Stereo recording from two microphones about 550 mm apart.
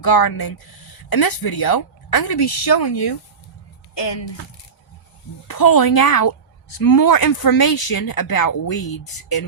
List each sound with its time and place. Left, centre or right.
0.0 s speech: left
5.5 s speech: left